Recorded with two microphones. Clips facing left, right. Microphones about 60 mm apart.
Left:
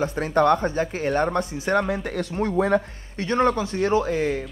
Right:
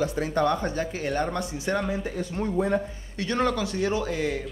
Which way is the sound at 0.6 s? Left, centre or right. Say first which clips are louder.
Left 4 dB; left.